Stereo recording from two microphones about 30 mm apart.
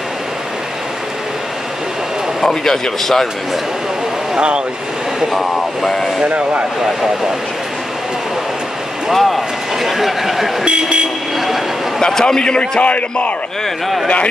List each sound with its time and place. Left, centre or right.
2.4 s speech: centre
5.3 s speech: centre
6.2 s speech: right
9.1 s speech: centre
10.6 s speech: right
11.3 s a sound: centre
12.0 s a man's voice: centre
12.4 s a man's voice: left
12.8 s a man's voice: left